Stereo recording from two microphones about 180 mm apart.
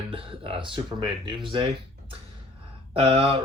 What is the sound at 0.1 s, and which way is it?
Speech, 30° right (ahead or behind).